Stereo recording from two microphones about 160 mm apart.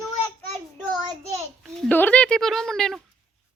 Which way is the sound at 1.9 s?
10° left (ahead or behind).